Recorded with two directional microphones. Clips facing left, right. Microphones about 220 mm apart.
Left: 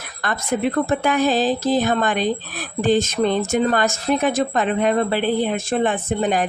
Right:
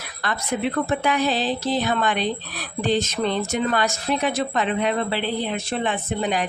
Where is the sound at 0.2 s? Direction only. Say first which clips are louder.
Left 3 dB; 50° left (ahead or behind).